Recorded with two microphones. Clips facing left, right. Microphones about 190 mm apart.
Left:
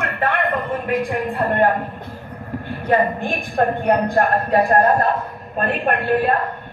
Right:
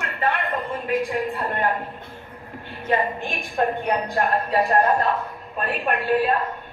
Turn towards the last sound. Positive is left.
turn(degrees=50)  # may be behind; listen again after turning